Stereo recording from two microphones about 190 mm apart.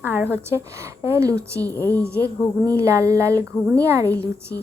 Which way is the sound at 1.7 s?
10° left (ahead or behind).